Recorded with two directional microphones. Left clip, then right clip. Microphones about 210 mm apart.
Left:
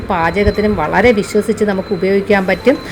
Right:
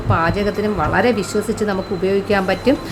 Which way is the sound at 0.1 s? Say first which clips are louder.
Left 4 dB; 15° left (ahead or behind).